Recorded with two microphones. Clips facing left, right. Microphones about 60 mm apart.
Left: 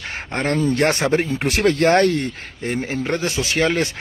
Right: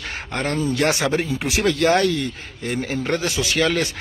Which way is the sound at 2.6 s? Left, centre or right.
Left.